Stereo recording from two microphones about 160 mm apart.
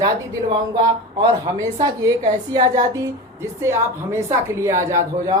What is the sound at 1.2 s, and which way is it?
A woman's voice, 20° right (ahead or behind).